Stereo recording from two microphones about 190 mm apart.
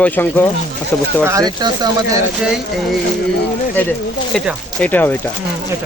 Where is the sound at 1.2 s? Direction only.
15° right (ahead or behind).